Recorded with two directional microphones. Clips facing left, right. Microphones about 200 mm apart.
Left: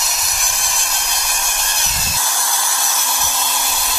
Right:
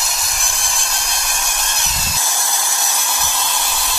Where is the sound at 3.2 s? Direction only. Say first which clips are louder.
Even; centre (ahead or behind).